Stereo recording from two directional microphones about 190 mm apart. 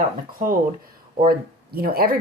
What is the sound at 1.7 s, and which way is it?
Speech, 50° right (ahead or behind).